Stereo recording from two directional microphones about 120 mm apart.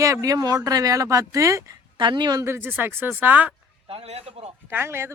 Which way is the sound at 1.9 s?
40° right (ahead or behind).